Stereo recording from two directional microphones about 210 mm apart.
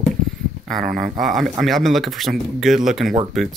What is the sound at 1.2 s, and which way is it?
Speech, centre (ahead or behind).